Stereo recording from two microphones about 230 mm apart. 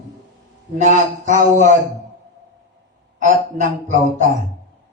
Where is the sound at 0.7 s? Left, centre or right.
Right.